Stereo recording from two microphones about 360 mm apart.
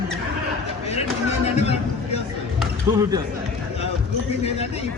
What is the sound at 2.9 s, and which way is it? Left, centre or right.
Speech, centre.